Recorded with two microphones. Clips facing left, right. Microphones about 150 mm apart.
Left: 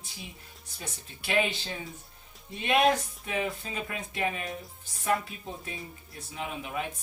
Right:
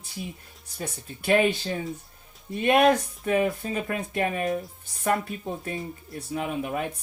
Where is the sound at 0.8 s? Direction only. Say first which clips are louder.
Right 8 dB; 50° right (ahead or behind).